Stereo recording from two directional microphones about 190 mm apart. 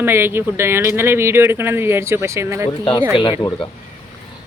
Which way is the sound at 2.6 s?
25° left (ahead or behind).